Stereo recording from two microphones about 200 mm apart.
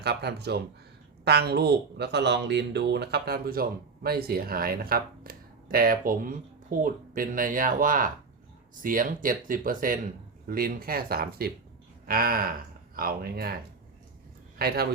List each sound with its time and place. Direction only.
0.0 s speech: 55° right (ahead or behind)
14.6 s speech: 50° right (ahead or behind)